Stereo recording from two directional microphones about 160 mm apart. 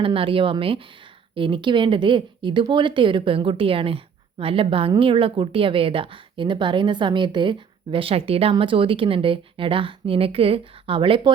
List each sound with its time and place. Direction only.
0.0 s speech: 35° right (ahead or behind)